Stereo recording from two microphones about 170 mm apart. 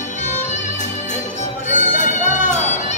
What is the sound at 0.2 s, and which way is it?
Music, 45° left (ahead or behind).